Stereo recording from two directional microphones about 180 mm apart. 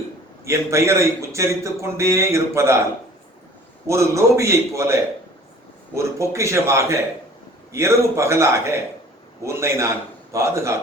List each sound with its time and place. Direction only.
0.4 s a man's voice: 15° right (ahead or behind)
3.8 s a man's voice: 15° right (ahead or behind)